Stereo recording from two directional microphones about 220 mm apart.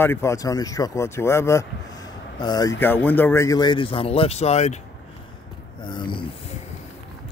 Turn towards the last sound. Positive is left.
turn(degrees=20)  # may be behind; listen again after turning